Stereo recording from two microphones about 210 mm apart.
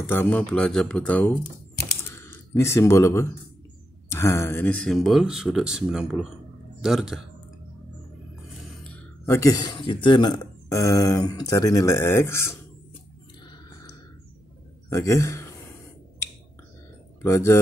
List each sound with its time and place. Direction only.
0.1 s speech: 10° left (ahead or behind)
2.0 s a sound: 10° left (ahead or behind)
4.1 s speech: 15° left (ahead or behind)
8.9 s speech: 15° left (ahead or behind)
14.9 s a man's voice: 15° left (ahead or behind)
17.2 s speech: 15° left (ahead or behind)